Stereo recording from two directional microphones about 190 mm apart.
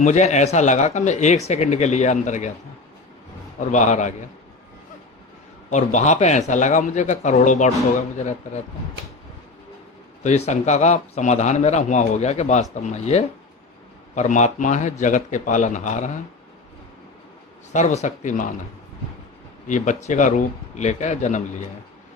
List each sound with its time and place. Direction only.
0.0 s speech: 40° left (ahead or behind)
3.6 s speech: 40° left (ahead or behind)
5.7 s speech: 40° left (ahead or behind)
10.2 s speech: 35° left (ahead or behind)
17.7 s speech: 40° left (ahead or behind)
19.6 s speech: 40° left (ahead or behind)